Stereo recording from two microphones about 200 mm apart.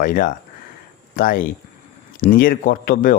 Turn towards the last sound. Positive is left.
turn(degrees=45)  # may be behind; listen again after turning